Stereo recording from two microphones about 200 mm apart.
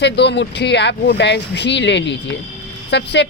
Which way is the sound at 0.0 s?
60° left (ahead or behind).